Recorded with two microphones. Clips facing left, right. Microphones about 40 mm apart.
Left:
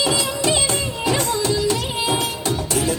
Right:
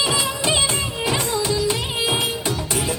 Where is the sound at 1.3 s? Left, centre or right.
Centre.